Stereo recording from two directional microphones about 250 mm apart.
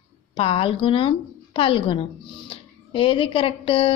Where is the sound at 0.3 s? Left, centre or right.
Left.